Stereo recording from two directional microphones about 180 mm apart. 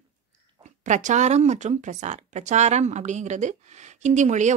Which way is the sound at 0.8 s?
40° right (ahead or behind).